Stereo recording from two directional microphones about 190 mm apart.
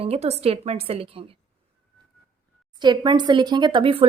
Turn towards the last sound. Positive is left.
turn(degrees=-30)  # may be behind; listen again after turning